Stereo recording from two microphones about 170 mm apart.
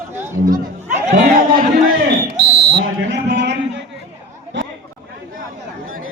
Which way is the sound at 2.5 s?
80° right.